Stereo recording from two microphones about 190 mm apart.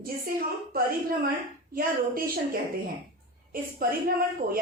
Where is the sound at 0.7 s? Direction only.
50° right (ahead or behind).